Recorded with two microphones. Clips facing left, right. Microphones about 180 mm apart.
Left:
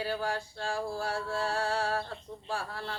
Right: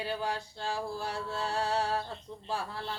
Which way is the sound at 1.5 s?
25° right (ahead or behind).